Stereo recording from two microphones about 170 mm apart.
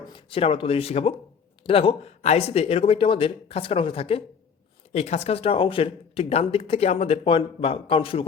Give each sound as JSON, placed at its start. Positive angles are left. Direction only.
{"t": 0.1, "sound": "speech", "side_deg": 35}